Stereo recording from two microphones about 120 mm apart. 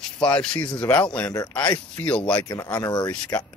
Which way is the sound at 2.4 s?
30° left (ahead or behind).